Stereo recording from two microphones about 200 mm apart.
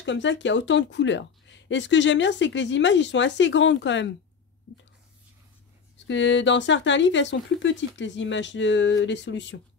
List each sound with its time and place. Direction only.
0.0 s speech: 65° left (ahead or behind)
6.0 s speech: 65° left (ahead or behind)